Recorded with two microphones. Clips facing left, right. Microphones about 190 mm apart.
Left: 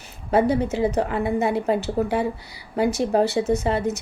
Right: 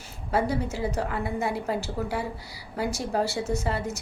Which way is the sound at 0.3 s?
20° left (ahead or behind).